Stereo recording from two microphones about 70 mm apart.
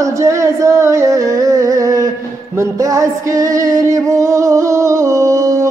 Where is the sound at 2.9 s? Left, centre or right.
Right.